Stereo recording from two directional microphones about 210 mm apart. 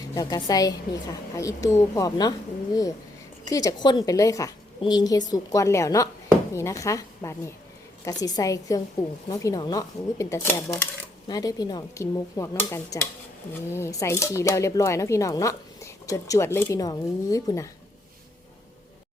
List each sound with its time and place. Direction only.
0.1 s speech: 20° left (ahead or behind)
3.4 s speech: 15° left (ahead or behind)